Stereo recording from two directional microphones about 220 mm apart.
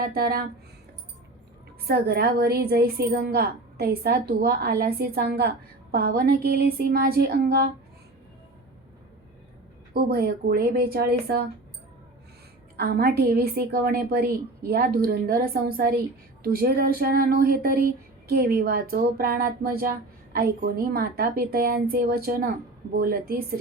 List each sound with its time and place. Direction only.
0.0 s a woman's voice: 45° right (ahead or behind)
1.9 s a woman's voice: 45° right (ahead or behind)
9.9 s a woman's voice: 45° right (ahead or behind)
12.8 s a woman's voice: 45° right (ahead or behind)